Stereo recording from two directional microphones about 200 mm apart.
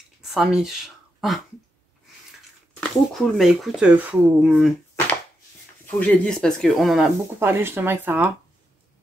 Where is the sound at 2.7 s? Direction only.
Centre (ahead or behind).